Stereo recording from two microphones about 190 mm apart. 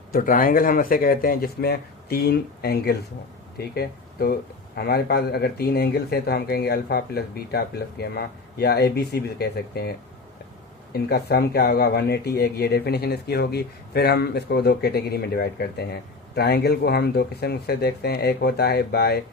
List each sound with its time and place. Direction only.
0.1 s speech: 45° left (ahead or behind)
10.9 s speech: 55° left (ahead or behind)